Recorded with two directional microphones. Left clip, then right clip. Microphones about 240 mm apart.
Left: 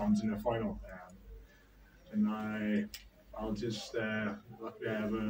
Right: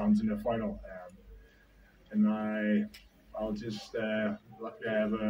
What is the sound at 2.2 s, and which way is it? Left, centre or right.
Speech, right.